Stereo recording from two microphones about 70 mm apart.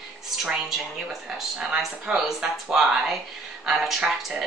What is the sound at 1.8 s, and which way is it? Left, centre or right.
Speech, centre.